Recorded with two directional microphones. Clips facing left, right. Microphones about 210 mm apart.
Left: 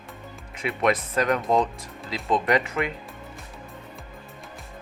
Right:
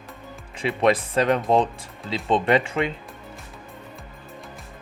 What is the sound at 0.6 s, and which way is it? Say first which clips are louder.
Speech: right 3 dB; 30° right (ahead or behind).